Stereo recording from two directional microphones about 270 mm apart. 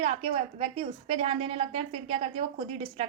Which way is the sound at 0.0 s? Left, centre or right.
Right.